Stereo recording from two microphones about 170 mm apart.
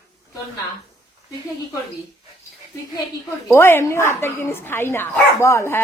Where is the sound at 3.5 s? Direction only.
15° left (ahead or behind).